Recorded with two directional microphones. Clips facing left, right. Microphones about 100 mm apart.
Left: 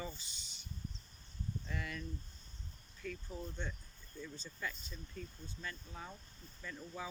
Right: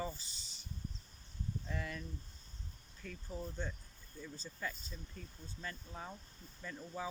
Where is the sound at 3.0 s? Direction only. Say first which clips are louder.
Left 5 dB; 30° right (ahead or behind).